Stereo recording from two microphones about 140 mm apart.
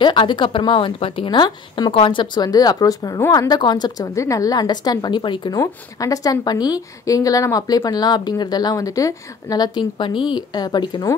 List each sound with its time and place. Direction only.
0.0 s a woman's voice: 35° left (ahead or behind)
5.6 s a woman's voice: 25° left (ahead or behind)